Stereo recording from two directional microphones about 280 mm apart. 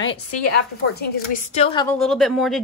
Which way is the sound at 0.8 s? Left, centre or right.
Left.